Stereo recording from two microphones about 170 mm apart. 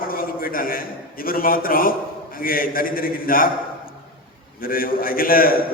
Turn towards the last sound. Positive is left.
turn(degrees=60)  # may be behind; listen again after turning